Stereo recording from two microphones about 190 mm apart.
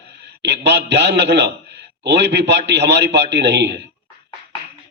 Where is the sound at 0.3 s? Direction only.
65° right (ahead or behind).